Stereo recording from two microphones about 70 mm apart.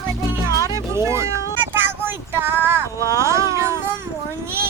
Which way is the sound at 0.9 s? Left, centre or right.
Right.